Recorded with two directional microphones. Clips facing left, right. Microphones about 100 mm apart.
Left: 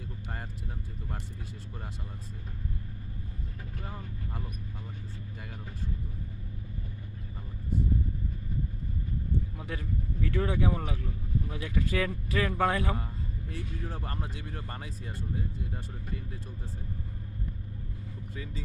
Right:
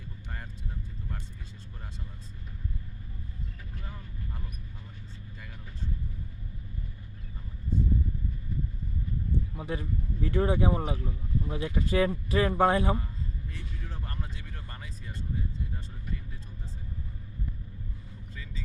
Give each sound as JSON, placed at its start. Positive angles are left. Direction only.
{"t": 9.6, "sound": "speech", "side_deg": -25}
{"t": 14.3, "sound": "speech", "side_deg": 50}